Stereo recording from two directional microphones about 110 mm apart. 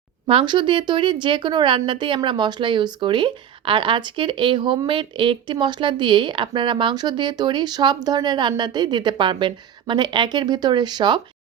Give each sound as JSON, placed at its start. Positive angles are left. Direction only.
{"t": 0.3, "sound": "a woman's voice", "side_deg": -50}